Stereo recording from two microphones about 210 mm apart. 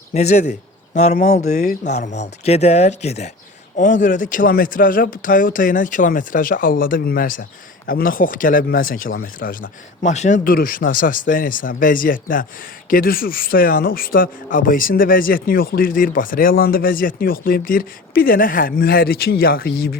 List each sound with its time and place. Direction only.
0.1 s a man's voice: 30° left (ahead or behind)